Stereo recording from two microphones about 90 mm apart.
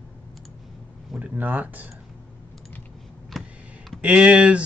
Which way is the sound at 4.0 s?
15° right (ahead or behind).